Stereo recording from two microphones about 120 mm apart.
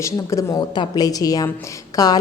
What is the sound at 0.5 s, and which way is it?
A woman's voice, 40° left (ahead or behind).